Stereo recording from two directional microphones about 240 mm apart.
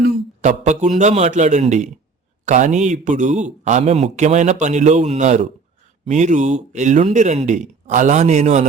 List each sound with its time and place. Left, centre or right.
0.0 s a man's voice: right